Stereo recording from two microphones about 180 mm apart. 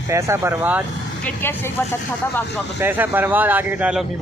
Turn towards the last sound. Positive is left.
turn(degrees=-10)  # may be behind; listen again after turning